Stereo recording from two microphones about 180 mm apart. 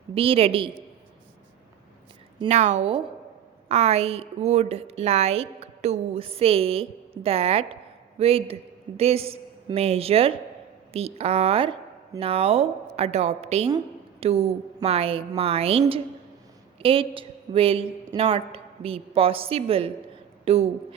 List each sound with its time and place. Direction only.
0.1 s a woman's voice: 30° right (ahead or behind)
2.5 s a woman's voice: 40° right (ahead or behind)
16.8 s a woman's voice: 30° right (ahead or behind)